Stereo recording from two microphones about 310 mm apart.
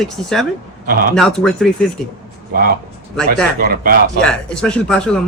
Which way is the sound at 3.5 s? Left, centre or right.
Right.